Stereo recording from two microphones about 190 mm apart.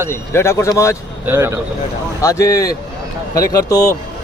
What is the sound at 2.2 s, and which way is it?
Speech, 15° left (ahead or behind).